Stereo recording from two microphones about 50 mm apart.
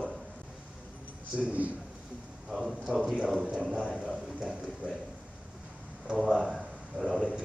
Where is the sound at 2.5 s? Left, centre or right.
Centre.